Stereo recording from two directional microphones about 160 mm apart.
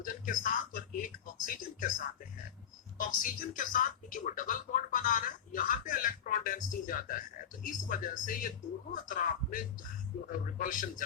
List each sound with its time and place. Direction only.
0.0 s speech: 55° left (ahead or behind)
3.0 s speech: 55° left (ahead or behind)